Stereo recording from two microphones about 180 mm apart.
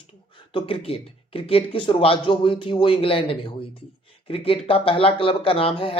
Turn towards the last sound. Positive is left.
turn(degrees=30)  # may be behind; listen again after turning